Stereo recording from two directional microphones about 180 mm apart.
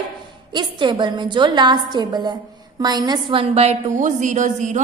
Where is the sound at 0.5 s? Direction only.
25° right (ahead or behind).